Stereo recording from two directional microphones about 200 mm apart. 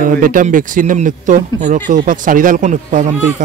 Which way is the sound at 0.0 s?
40° right (ahead or behind).